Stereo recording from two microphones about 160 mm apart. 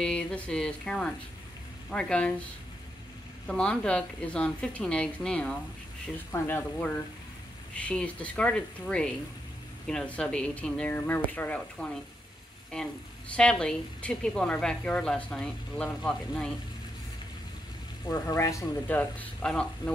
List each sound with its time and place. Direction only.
0.0 s a woman's voice: 5° left (ahead or behind)
3.4 s a woman's voice: 5° left (ahead or behind)
18.0 s speech: 20° left (ahead or behind)